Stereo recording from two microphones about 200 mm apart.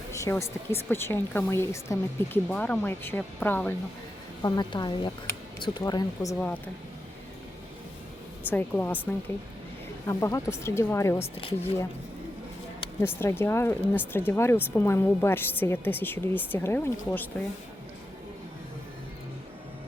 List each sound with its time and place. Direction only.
0.1 s speech: 15° left (ahead or behind)
4.4 s a woman's voice: 20° left (ahead or behind)
8.4 s speech: 10° left (ahead or behind)
10.1 s speech: 15° left (ahead or behind)
11.2 s a woman's voice: 25° left (ahead or behind)
13.0 s speech: 10° left (ahead or behind)